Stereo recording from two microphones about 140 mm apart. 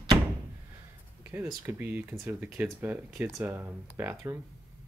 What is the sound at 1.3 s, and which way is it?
Speech, 15° right (ahead or behind).